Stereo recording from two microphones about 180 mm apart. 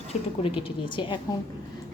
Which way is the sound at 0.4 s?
30° left (ahead or behind).